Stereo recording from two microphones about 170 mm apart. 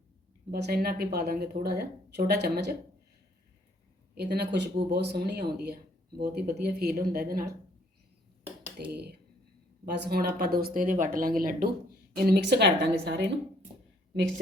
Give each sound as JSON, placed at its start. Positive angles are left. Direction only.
{"t": 0.5, "sound": "speech", "side_deg": -65}
{"t": 4.2, "sound": "speech", "side_deg": -75}
{"t": 8.9, "sound": "speech", "side_deg": -70}
{"t": 12.1, "sound": "a woman's voice", "side_deg": -65}